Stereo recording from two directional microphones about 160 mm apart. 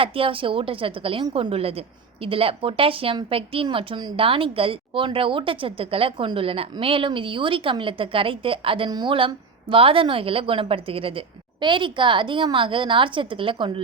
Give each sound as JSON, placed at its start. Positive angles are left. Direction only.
{"t": 0.0, "sound": "speech", "side_deg": -35}